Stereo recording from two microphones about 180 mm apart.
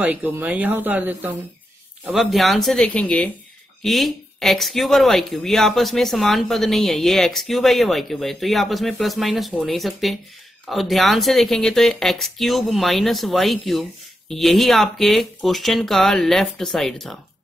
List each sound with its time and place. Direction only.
0.0 s speech: 10° right (ahead or behind)